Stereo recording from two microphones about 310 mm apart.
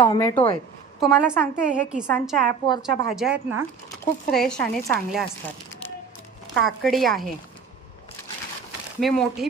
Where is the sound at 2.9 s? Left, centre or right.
Right.